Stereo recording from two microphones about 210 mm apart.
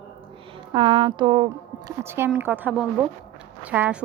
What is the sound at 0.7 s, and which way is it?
Speech, 25° right (ahead or behind).